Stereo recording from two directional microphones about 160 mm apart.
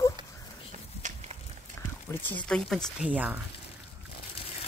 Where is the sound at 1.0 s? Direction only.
50° right (ahead or behind).